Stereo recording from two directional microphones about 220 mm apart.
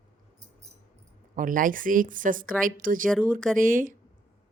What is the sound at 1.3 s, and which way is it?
A woman's voice, 40° right (ahead or behind).